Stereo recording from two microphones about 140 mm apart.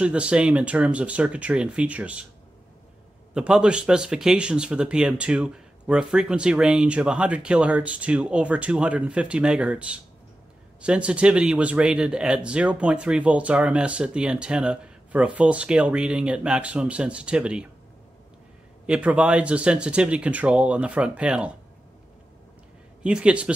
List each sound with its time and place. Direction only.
0.0 s speech: 10° right (ahead or behind)
3.3 s speech: 5° right (ahead or behind)
18.9 s speech: 10° right (ahead or behind)
23.0 s speech: 5° right (ahead or behind)